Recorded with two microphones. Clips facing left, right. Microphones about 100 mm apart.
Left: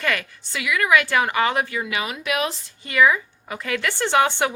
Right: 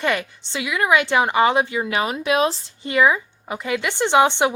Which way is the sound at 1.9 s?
35° right (ahead or behind).